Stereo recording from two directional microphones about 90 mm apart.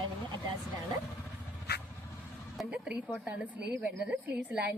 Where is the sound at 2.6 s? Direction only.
10° right (ahead or behind).